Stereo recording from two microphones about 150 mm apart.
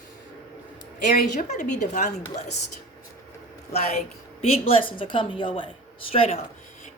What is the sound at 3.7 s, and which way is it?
A woman's voice, 45° left (ahead or behind).